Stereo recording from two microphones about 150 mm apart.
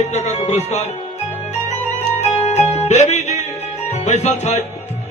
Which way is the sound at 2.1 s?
45° left (ahead or behind).